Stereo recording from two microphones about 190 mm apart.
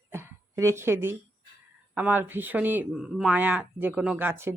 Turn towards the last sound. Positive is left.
turn(degrees=-10)  # may be behind; listen again after turning